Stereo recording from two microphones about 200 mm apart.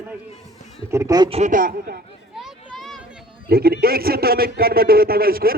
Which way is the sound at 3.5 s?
50° right (ahead or behind).